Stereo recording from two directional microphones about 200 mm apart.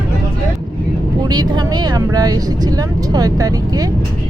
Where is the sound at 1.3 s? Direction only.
20° right (ahead or behind).